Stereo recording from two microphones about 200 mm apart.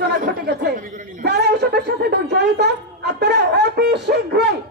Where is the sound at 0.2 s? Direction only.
50° right (ahead or behind).